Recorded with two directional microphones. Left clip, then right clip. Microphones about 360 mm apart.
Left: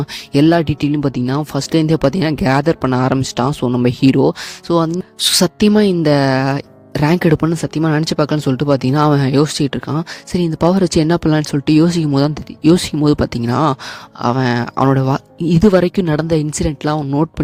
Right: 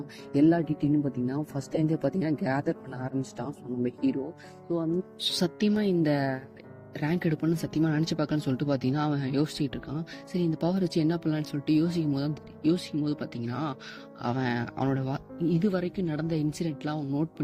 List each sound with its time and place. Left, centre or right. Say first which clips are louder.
0.3 s speech: left 11 dB; left